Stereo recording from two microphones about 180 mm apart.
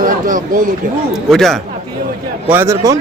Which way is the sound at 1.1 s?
Centre (ahead or behind).